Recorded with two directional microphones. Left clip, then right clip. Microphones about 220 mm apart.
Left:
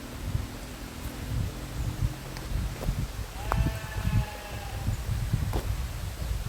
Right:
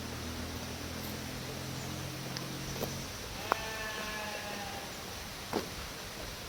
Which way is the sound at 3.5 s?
5° right (ahead or behind).